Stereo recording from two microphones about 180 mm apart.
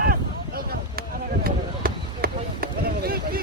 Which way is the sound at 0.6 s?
55° right (ahead or behind).